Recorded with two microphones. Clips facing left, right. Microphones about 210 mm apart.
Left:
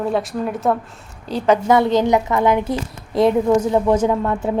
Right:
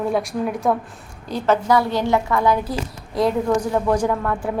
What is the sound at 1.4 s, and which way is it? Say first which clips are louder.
A woman's voice: left 3 dB; 15° left (ahead or behind).